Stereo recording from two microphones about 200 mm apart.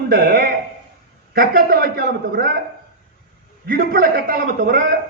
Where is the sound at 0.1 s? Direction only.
50° right (ahead or behind).